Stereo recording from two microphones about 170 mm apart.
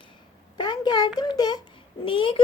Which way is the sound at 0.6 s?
25° left (ahead or behind).